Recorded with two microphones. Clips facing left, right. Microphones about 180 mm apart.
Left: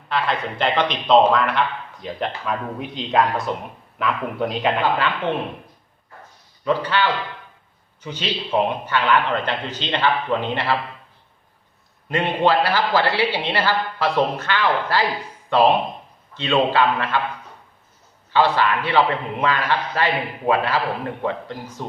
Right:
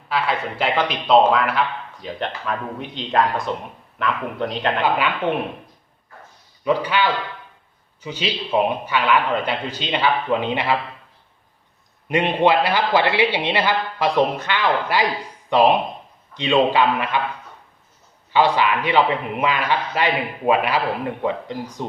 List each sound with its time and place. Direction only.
0.1 s a man's voice: 5° right (ahead or behind)
4.8 s a man's voice: 10° right (ahead or behind)
6.7 s a man's voice: 15° right (ahead or behind)
12.0 s a man's voice: 15° right (ahead or behind)
18.3 s a man's voice: 15° right (ahead or behind)